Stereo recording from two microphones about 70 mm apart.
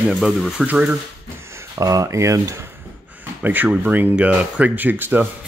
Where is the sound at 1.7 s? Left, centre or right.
Right.